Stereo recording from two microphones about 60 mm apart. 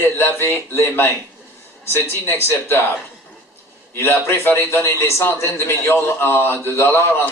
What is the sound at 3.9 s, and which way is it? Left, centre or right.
A man's voice, left.